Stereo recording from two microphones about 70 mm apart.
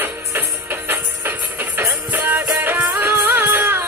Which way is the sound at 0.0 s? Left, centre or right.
Right.